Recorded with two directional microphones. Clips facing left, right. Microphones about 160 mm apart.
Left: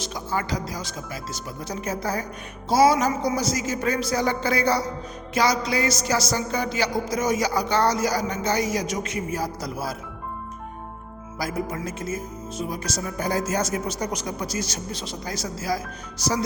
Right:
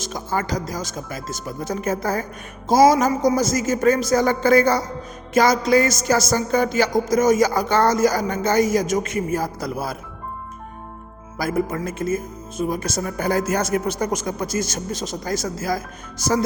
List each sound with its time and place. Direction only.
0.0 s speech: 45° right (ahead or behind)
11.3 s speech: 55° right (ahead or behind)